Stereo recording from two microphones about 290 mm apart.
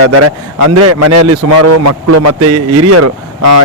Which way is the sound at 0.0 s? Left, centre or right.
Right.